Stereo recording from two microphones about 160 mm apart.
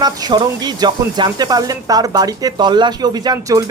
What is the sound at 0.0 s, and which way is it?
Speech, 25° right (ahead or behind).